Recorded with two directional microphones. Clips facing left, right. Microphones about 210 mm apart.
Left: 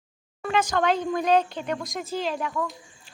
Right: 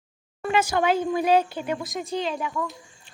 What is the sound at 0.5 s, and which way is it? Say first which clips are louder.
Speech: right 1 dB; 10° right (ahead or behind).